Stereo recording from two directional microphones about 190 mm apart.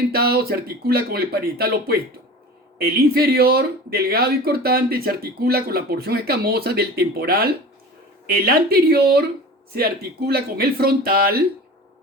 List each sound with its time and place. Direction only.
0.1 s speech: 55° right (ahead or behind)